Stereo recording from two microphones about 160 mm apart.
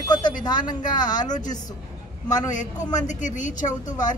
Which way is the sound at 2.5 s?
50° left (ahead or behind).